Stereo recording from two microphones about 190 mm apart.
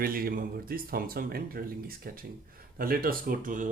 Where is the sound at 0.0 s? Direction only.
50° right (ahead or behind).